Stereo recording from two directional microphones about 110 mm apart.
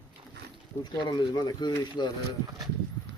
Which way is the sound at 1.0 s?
40° left (ahead or behind).